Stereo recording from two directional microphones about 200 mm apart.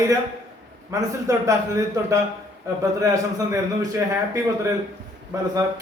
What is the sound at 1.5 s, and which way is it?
A man's voice, 15° right (ahead or behind).